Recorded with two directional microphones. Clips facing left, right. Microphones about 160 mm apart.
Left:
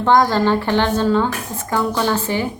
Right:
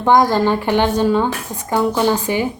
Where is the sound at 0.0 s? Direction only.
15° right (ahead or behind).